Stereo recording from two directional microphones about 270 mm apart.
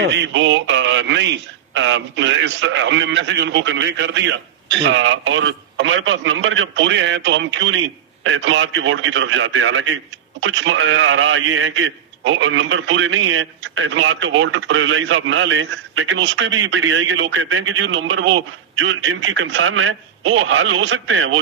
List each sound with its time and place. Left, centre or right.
0.0 s a man's voice: right